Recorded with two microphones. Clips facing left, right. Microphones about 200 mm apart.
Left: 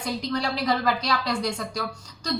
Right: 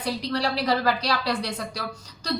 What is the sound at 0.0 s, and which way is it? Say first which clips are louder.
Speech: right 1 dB; 35° right (ahead or behind).